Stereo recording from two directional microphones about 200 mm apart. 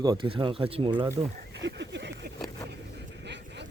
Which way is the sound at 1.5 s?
60° right (ahead or behind).